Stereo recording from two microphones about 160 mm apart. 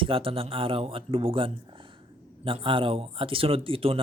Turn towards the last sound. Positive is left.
turn(degrees=-35)  # may be behind; listen again after turning